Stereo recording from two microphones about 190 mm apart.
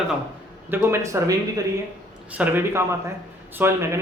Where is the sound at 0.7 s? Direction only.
15° right (ahead or behind).